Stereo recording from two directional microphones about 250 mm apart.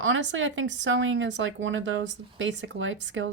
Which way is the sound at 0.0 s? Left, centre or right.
Right.